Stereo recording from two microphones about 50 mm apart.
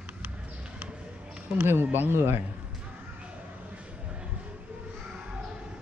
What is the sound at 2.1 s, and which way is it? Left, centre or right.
Speech, right.